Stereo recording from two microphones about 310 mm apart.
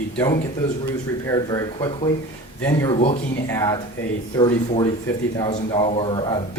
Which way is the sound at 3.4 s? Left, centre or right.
Centre.